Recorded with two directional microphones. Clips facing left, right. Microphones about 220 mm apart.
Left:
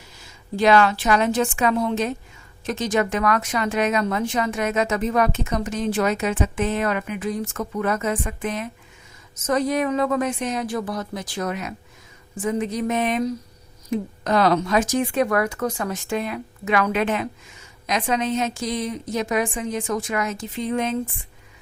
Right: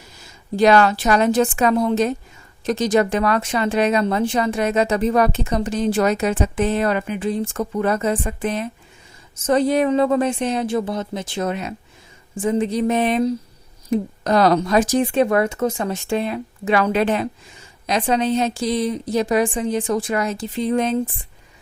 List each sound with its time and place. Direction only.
0.5 s speech: 40° right (ahead or behind)